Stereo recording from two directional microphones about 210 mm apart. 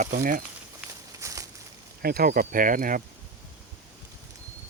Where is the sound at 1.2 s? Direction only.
15° right (ahead or behind).